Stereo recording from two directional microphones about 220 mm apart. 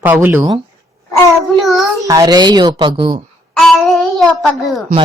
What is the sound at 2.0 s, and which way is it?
Speech, 15° right (ahead or behind).